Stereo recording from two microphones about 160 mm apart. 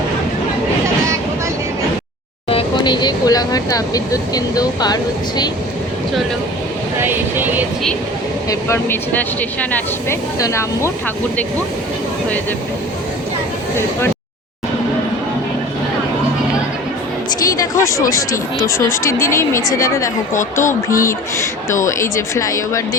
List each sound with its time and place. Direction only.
2.5 s speech: 30° left (ahead or behind)
7.0 s speech: 15° right (ahead or behind)
8.4 s speech: 15° left (ahead or behind)
17.6 s speech: 20° left (ahead or behind)
20.3 s speech: 55° left (ahead or behind)
20.9 s speech: 20° left (ahead or behind)